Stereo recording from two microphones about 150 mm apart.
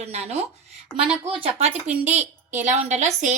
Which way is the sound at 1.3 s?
40° right (ahead or behind).